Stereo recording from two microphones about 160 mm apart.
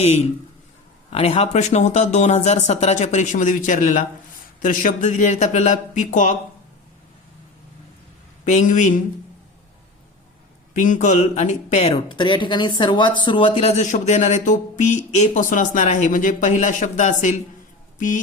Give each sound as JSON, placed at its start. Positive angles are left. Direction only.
{"t": 0.0, "sound": "speech", "side_deg": 40}
{"t": 8.4, "sound": "speech", "side_deg": 50}
{"t": 10.8, "sound": "speech", "side_deg": 50}